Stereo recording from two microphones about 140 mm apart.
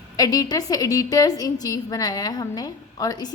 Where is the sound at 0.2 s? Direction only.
30° left (ahead or behind).